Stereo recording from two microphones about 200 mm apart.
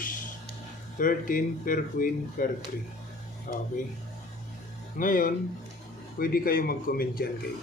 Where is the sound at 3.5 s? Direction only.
45° left (ahead or behind).